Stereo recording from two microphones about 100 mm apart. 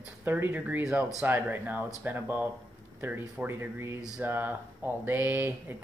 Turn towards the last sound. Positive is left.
turn(degrees=-20)  # may be behind; listen again after turning